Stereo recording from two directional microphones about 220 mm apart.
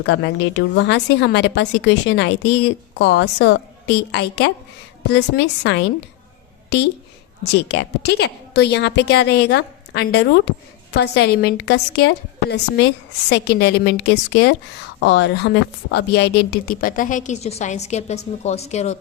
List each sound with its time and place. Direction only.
0.0 s a woman's voice: 50° left (ahead or behind); by 18.9 s 30° left (ahead or behind)